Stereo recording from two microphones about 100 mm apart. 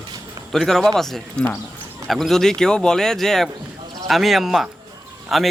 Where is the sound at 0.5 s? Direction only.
5° left (ahead or behind).